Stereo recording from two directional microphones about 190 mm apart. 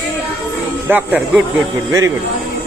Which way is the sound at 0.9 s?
10° right (ahead or behind).